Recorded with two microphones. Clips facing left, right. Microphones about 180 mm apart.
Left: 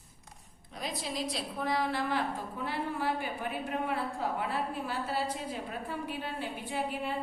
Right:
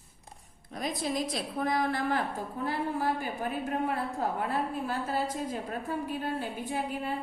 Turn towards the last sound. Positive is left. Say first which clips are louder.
# right 2 dB
turn(degrees=-45)  # may be behind; listen again after turning